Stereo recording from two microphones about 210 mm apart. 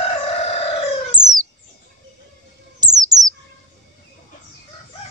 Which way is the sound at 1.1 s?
20° right (ahead or behind).